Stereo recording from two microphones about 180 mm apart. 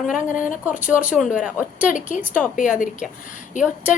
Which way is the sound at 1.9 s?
45° left (ahead or behind).